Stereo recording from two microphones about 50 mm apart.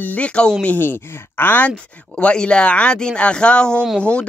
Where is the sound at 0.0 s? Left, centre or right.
Left.